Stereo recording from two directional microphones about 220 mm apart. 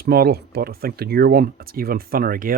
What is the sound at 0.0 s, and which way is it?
Speech, 45° right (ahead or behind).